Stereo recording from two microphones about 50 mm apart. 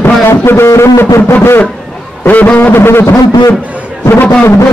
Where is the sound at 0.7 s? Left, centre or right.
Left.